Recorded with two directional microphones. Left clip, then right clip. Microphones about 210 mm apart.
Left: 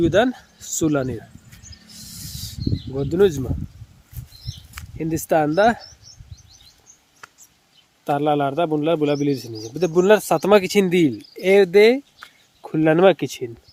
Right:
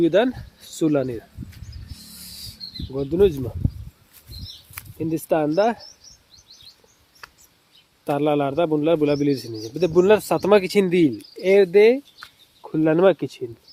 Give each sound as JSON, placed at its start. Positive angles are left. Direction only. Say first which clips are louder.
{"t": 0.0, "sound": "a man's voice", "louder": "left 1 dB", "side_deg": 10}
{"t": 2.9, "sound": "speech", "louder": "left 1 dB", "side_deg": 15}
{"t": 4.9, "sound": "speech", "louder": "left 2 dB", "side_deg": 20}
{"t": 8.0, "sound": "a man's voice", "louder": "left 1 dB", "side_deg": 5}